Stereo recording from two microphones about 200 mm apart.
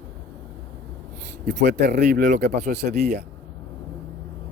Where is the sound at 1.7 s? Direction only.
55° right (ahead or behind).